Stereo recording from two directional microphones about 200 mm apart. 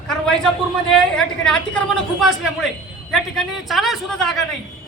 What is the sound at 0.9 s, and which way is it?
A woman's voice, 5° left (ahead or behind).